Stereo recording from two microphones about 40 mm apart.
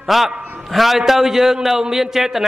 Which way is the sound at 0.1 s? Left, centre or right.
Centre.